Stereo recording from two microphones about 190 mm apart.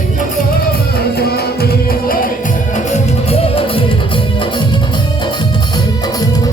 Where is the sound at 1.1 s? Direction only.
55° left (ahead or behind).